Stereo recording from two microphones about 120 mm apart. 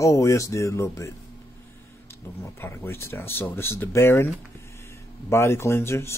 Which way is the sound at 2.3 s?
20° left (ahead or behind).